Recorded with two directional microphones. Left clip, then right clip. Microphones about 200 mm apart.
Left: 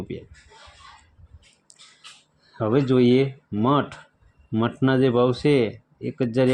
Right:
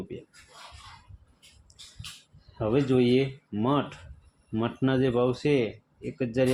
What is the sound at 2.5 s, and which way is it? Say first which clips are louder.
Speech: left 4 dB; 30° left (ahead or behind).